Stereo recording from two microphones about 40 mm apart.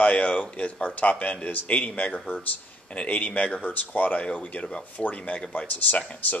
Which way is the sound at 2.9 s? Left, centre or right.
Left.